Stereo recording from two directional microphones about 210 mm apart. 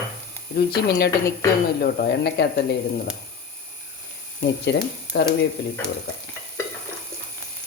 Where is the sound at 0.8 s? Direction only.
50° left (ahead or behind).